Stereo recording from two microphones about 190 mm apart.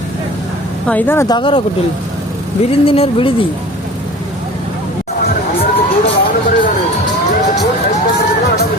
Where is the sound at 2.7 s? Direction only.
30° left (ahead or behind).